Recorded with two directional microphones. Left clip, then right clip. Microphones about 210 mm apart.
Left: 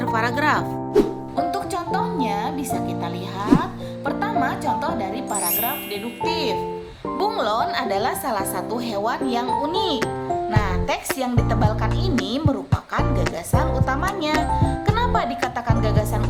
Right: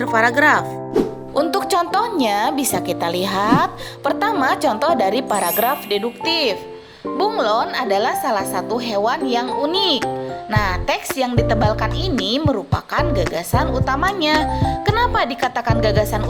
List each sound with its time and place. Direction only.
0.0 s speech: 25° right (ahead or behind)
0.9 s music: centre (ahead or behind)
1.4 s a woman's voice: 40° right (ahead or behind)
6.3 s speech: 25° right (ahead or behind)
7.2 s a woman's voice: 10° right (ahead or behind)
14.5 s music: 15° right (ahead or behind)
15.5 s a woman's voice: 15° right (ahead or behind)